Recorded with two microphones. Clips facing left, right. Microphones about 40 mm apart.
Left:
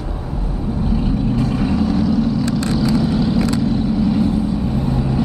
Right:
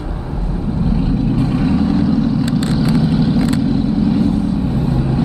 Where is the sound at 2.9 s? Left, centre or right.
Centre.